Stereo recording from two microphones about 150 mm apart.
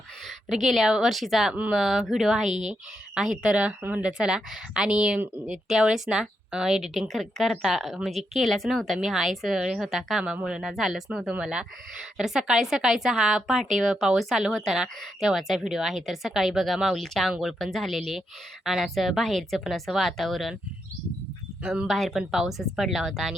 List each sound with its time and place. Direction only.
0.3 s a woman's voice: centre (ahead or behind)
2.5 s speech: 50° right (ahead or behind)
3.2 s a woman's voice: 5° right (ahead or behind)
21.6 s a woman's voice: 5° right (ahead or behind)